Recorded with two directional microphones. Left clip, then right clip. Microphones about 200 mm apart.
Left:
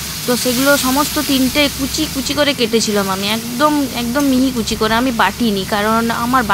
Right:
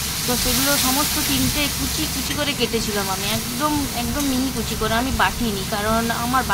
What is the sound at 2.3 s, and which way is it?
Speech, 35° left (ahead or behind).